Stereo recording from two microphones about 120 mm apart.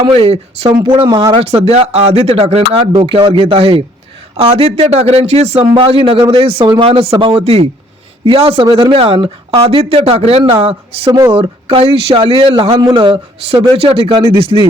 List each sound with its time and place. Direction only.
0.1 s speech: 55° right (ahead or behind)
0.9 s speech: 40° right (ahead or behind)
1.6 s speech: 60° right (ahead or behind)
5.6 s speech: 45° right (ahead or behind)
8.2 s speech: 45° right (ahead or behind)
13.5 s speech: 55° right (ahead or behind)